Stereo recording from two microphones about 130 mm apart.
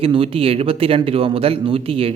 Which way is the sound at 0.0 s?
45° right (ahead or behind).